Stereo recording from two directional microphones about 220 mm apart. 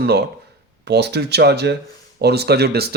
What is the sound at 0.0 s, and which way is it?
Speech, 45° right (ahead or behind).